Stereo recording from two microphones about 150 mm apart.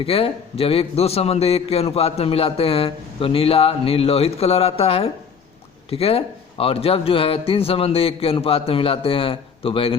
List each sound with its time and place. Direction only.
0.0 s a man's voice: 40° left (ahead or behind)